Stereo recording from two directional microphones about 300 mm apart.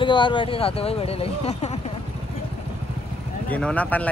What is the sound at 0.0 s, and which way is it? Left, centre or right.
Speech, centre.